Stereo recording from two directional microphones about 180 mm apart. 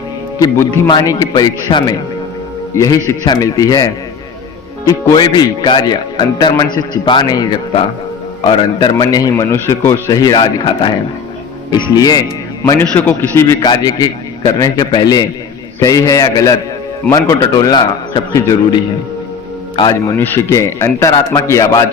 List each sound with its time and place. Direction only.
0.3 s a man's voice: 15° left (ahead or behind)
4.9 s a man's voice: 20° left (ahead or behind)
8.4 s a man's voice: 25° left (ahead or behind)
12.8 s a man's voice: 10° left (ahead or behind); by 20.1 s 25° left (ahead or behind)
20.1 s a man's voice: 10° left (ahead or behind)